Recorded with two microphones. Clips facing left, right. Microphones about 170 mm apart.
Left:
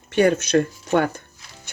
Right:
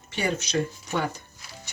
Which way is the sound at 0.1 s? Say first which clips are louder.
Left 10 dB; 55° left (ahead or behind).